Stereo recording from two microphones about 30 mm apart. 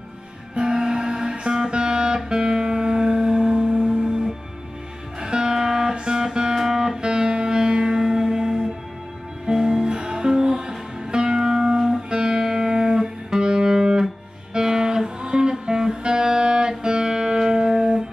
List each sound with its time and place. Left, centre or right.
0.6 s music: right